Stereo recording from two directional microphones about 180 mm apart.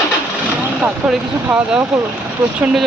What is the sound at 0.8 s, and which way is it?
Speech, 5° right (ahead or behind).